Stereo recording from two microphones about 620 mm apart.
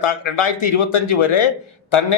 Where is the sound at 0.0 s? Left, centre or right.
Left.